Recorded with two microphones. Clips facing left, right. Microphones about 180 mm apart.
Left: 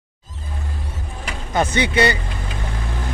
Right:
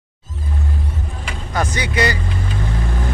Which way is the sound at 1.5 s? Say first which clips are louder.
Left 3 dB; 25° left (ahead or behind).